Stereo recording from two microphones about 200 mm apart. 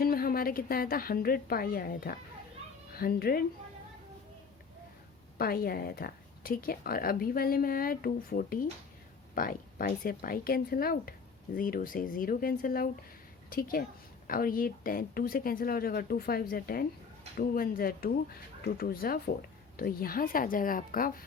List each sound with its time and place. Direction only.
0.0 s a woman's voice: 45° left (ahead or behind)
5.4 s a woman's voice: 50° left (ahead or behind)